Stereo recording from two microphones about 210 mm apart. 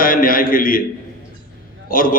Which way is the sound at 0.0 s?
40° left (ahead or behind).